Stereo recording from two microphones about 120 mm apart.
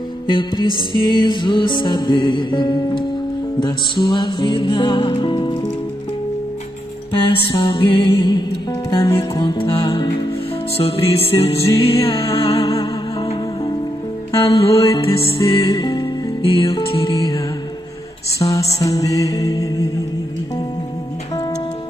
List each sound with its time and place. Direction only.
0.3 s music: 45° left (ahead or behind)
7.1 s music: 45° left (ahead or behind)
10.8 s music: 55° left (ahead or behind)
14.4 s music: 50° left (ahead or behind)
15.3 s music: 40° left (ahead or behind)
18.4 s music: 30° left (ahead or behind)